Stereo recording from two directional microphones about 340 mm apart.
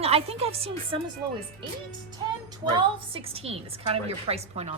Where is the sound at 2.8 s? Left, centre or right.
Centre.